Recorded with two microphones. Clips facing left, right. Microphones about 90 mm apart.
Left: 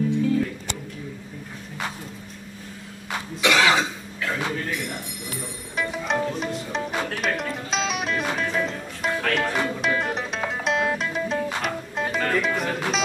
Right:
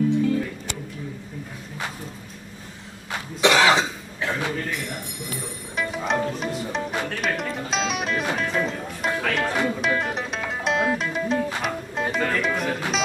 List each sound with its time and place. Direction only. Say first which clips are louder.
3.3 s cough: right 2 dB; 30° right (ahead or behind)
5.8 s music: right 1 dB; centre (ahead or behind)